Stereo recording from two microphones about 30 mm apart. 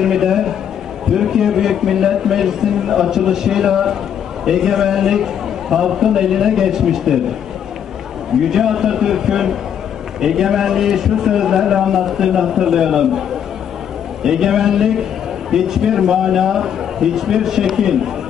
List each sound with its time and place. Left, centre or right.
0.0 s a sound: centre
1.1 s a man's voice: centre
8.5 s a man's voice: centre
14.2 s a man's voice: centre